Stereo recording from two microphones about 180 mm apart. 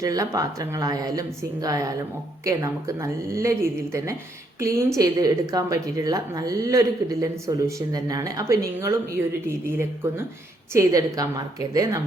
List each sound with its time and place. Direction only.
0.0 s speech: 20° right (ahead or behind)